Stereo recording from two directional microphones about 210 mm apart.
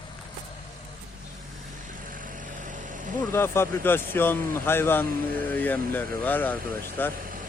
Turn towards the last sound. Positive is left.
turn(degrees=10)  # may be behind; listen again after turning